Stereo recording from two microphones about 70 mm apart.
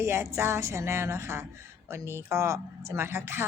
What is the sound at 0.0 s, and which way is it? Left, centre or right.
Speech, right.